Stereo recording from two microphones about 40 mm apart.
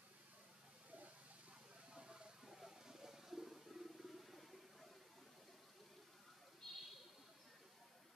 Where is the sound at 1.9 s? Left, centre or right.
Right.